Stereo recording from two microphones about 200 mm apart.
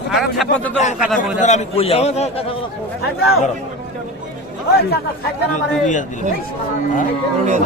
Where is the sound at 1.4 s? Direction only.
35° left (ahead or behind).